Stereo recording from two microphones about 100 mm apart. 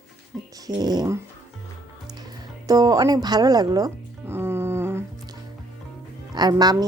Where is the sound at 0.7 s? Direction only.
45° right (ahead or behind).